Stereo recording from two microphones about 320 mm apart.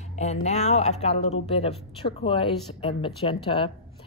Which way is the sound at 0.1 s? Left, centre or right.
Left.